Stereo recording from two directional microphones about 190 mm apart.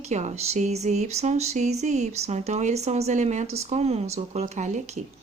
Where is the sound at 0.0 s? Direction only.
35° right (ahead or behind).